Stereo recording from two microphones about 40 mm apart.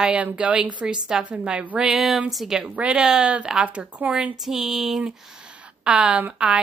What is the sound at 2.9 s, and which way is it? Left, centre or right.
Speech, centre.